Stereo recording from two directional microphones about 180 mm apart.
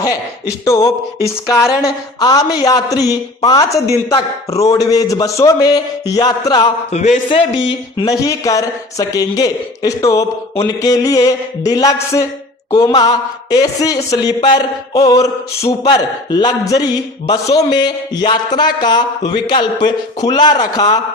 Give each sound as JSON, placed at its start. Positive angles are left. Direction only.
{"t": 0.6, "sound": "a sound", "side_deg": 20}
{"t": 2.1, "sound": "speech", "side_deg": 20}
{"t": 6.9, "sound": "a man's voice", "side_deg": 40}
{"t": 7.3, "sound": "speech", "side_deg": 30}